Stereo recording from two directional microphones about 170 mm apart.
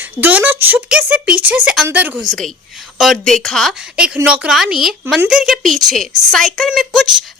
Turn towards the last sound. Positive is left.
turn(degrees=0)  # may be behind; listen again after turning